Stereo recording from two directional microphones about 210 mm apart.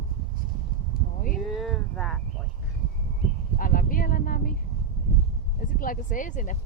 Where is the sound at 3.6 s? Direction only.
40° left (ahead or behind).